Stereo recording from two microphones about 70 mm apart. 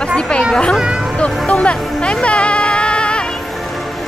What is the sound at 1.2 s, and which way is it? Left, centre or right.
Music, centre.